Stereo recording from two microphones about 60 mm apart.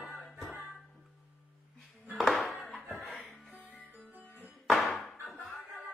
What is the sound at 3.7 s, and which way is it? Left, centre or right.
Music, right.